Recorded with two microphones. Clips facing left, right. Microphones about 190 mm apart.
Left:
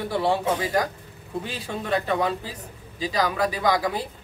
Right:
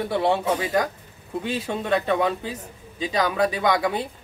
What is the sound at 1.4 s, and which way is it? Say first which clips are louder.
A woman's voice: right 7 dB; 25° right (ahead or behind).